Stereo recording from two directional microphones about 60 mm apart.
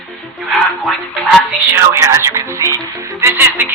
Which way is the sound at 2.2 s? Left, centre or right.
Right.